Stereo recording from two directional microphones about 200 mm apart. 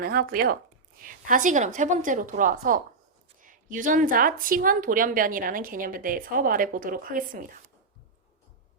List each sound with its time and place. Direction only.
0.0 s a woman's voice: 45° right (ahead or behind)